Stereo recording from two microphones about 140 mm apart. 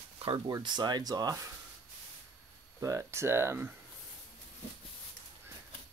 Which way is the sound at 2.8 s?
20° right (ahead or behind).